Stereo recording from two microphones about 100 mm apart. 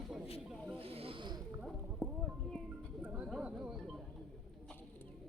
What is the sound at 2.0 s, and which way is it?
Clip-clop, 10° left (ahead or behind).